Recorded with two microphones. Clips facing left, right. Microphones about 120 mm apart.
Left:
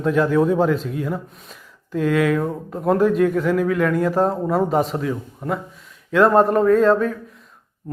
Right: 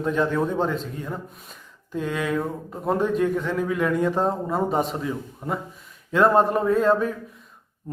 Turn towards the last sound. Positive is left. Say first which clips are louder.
# left 5 dB
turn(degrees=0)  # may be behind; listen again after turning